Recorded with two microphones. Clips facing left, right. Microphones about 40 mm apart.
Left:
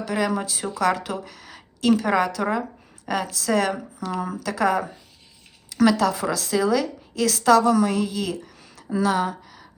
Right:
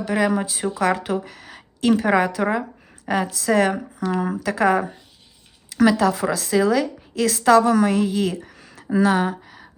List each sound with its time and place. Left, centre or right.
0.1 s a woman's voice: right